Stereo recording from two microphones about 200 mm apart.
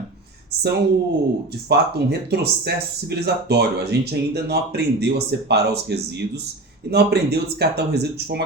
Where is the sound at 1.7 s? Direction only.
55° right (ahead or behind).